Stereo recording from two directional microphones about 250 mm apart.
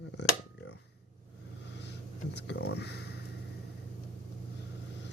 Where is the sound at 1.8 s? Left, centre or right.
Left.